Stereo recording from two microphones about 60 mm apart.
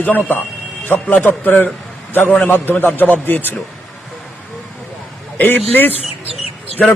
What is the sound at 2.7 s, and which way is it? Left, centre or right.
Speech, left.